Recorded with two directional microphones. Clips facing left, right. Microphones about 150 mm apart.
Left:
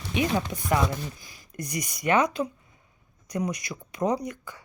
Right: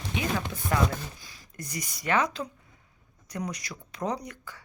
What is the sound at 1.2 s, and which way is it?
Speech, 15° left (ahead or behind).